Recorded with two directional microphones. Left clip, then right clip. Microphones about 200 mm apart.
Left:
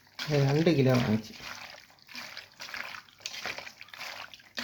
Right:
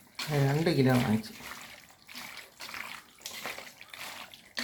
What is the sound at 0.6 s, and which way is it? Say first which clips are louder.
Speech: even; 25° left (ahead or behind).